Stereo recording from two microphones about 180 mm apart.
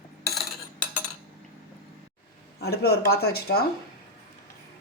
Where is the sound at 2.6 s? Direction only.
65° left (ahead or behind).